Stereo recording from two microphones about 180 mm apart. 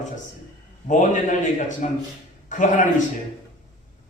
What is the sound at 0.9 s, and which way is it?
A man's voice, 45° left (ahead or behind).